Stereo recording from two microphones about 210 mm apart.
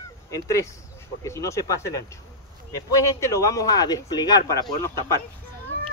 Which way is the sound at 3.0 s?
15° left (ahead or behind).